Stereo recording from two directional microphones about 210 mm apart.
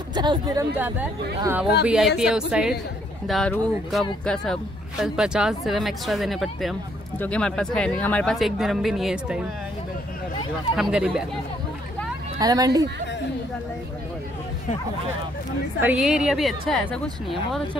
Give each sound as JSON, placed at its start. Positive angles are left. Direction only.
{"t": 0.1, "sound": "speech", "side_deg": -20}
{"t": 0.7, "sound": "speech", "side_deg": -10}
{"t": 10.8, "sound": "speech", "side_deg": -5}
{"t": 12.4, "sound": "speech", "side_deg": -15}
{"t": 15.8, "sound": "speech", "side_deg": -5}